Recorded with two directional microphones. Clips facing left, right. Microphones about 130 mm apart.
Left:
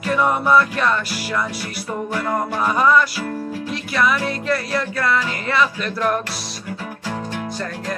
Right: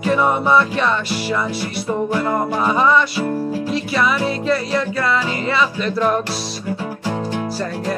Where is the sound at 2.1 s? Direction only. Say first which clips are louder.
Right 3 dB; 15° right (ahead or behind).